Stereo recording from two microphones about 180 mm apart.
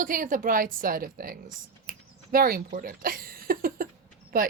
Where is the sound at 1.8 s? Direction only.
55° right (ahead or behind).